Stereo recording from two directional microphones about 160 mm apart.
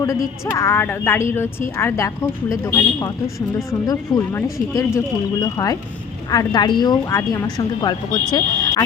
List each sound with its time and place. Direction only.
0.0 s a woman's voice: 20° left (ahead or behind)